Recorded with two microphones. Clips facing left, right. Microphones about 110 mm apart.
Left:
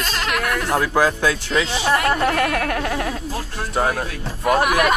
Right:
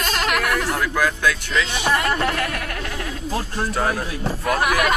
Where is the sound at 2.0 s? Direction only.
60° left (ahead or behind); by 3.1 s 45° left (ahead or behind).